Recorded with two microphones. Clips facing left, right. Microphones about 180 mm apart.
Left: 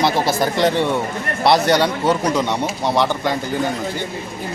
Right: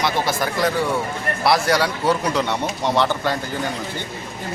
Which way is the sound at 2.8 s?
15° left (ahead or behind).